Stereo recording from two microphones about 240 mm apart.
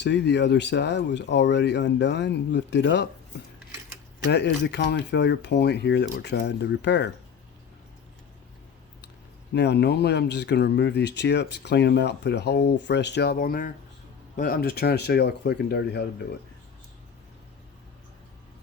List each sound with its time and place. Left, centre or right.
0.0 s speech: left
4.3 s speech: left
9.5 s speech: left